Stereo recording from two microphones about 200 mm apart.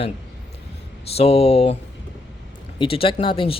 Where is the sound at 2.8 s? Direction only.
25° left (ahead or behind).